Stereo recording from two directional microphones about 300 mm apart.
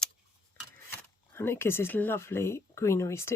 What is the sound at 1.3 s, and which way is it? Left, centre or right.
Speech, centre.